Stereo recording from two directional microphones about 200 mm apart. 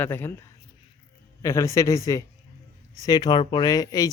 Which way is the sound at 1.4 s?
15° left (ahead or behind).